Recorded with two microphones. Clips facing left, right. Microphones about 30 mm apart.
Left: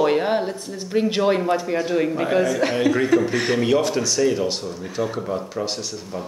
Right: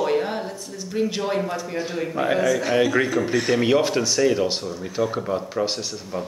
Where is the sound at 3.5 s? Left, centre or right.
Centre.